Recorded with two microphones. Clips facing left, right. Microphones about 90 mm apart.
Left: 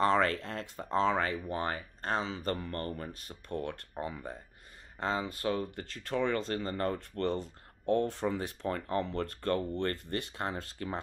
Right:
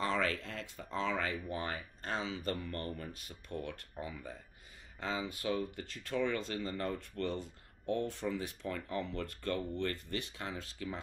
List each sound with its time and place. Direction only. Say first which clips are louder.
0.0 s speech: left 7 dB; 45° left (ahead or behind)